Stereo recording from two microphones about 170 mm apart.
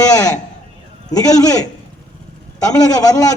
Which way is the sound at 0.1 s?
20° left (ahead or behind).